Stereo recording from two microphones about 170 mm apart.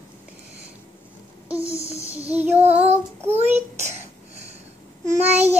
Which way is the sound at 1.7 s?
40° left (ahead or behind).